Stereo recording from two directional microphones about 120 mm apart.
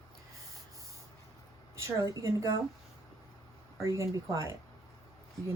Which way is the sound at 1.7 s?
25° right (ahead or behind).